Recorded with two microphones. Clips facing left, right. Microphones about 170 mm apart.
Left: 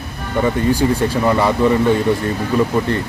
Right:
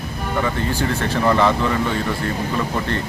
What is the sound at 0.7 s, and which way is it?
Speech, 10° left (ahead or behind).